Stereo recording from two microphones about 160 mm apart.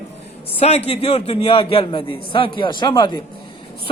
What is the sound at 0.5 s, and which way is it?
A man's voice, 40° left (ahead or behind).